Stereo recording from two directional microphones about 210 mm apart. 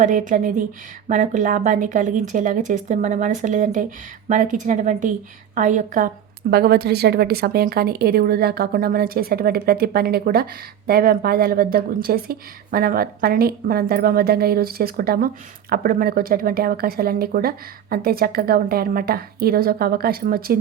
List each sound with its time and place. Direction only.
0.0 s speech: 40° right (ahead or behind)
6.5 s a woman's voice: 50° right (ahead or behind)